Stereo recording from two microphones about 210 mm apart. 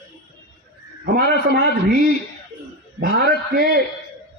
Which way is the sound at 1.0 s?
50° right (ahead or behind).